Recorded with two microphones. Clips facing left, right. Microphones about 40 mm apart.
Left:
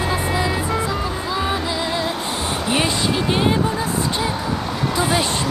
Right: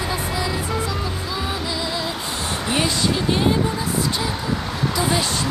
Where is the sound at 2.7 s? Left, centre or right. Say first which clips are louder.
Left 1 dB; left.